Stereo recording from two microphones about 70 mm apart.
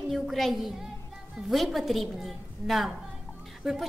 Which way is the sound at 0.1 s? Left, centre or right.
Centre.